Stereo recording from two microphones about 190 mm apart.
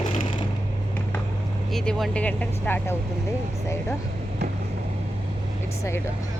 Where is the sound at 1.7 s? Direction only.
Centre (ahead or behind).